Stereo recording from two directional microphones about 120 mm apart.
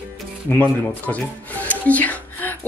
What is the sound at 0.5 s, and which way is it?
Speech, 15° left (ahead or behind).